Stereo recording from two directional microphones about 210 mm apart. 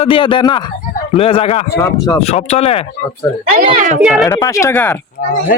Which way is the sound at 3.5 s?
35° right (ahead or behind).